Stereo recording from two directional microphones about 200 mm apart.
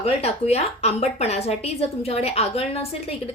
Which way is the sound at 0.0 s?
30° left (ahead or behind).